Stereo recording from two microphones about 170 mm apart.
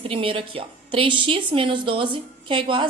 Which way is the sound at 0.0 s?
35° right (ahead or behind).